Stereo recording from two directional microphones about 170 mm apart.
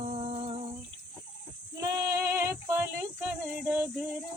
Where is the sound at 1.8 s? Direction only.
15° right (ahead or behind).